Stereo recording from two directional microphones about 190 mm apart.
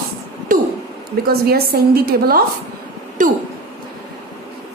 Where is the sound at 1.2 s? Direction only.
55° right (ahead or behind).